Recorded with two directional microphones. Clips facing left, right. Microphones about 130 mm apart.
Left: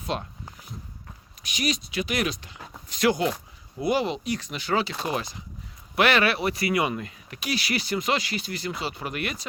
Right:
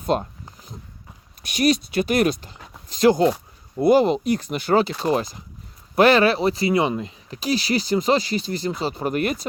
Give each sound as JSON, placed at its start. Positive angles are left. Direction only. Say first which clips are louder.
{"t": 0.1, "sound": "speech", "louder": "right 8 dB", "side_deg": -40}
{"t": 1.5, "sound": "speech", "louder": "right 9 dB", "side_deg": -55}